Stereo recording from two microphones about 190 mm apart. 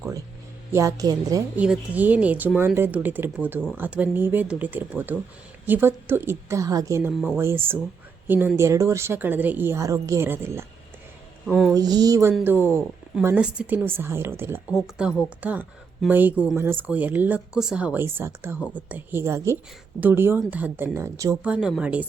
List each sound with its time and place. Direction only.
0.7 s a woman's voice: 15° right (ahead or behind)
1.5 s a woman's voice: 5° right (ahead or behind)
11.4 s speech: centre (ahead or behind)
11.7 s a woman's voice: 20° right (ahead or behind)